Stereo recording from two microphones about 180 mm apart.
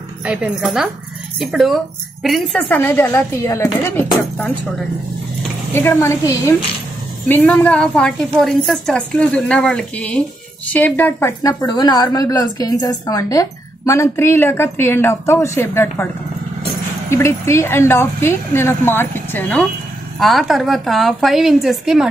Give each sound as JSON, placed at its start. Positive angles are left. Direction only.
{"t": 0.2, "sound": "a woman's voice", "side_deg": -5}
{"t": 17.1, "sound": "a woman's voice", "side_deg": 15}